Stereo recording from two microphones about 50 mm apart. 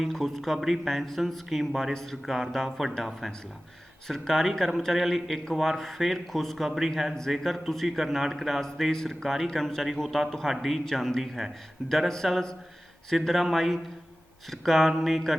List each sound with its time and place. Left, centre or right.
0.1 s speech: centre
1.9 s speech: centre
2.2 s speech: centre
11.9 s speech: centre